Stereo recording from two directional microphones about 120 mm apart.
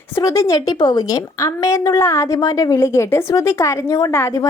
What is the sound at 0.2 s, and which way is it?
A woman's voice, 30° left (ahead or behind).